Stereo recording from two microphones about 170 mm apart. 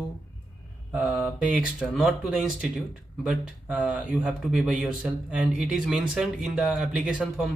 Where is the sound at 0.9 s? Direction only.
5° right (ahead or behind).